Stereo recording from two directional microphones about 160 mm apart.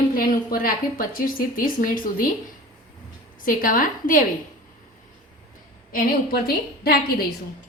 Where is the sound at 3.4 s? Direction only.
60° left (ahead or behind).